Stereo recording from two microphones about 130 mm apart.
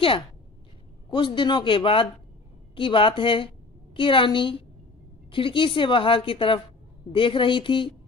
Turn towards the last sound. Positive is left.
turn(degrees=40)  # may be behind; listen again after turning